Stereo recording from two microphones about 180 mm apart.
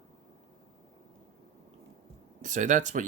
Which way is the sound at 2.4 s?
45° right (ahead or behind).